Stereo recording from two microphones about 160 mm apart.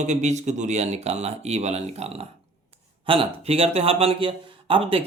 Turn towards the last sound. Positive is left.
turn(degrees=-35)  # may be behind; listen again after turning